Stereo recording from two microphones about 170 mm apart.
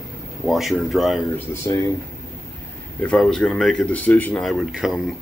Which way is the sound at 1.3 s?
15° left (ahead or behind).